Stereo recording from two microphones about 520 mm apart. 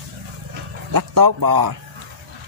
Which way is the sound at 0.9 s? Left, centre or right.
Right.